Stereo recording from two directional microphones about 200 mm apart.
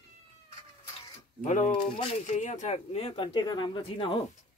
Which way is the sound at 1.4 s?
40° left (ahead or behind).